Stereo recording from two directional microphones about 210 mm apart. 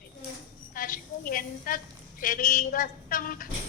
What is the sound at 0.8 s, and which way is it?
A woman's voice, 40° left (ahead or behind).